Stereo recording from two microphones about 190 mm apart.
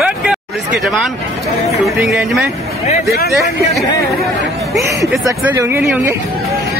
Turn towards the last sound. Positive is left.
turn(degrees=-5)  # may be behind; listen again after turning